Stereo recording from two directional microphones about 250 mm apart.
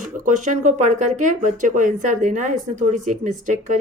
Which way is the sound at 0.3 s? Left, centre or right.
Right.